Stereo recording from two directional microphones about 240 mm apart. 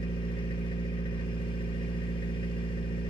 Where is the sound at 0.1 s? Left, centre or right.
Left.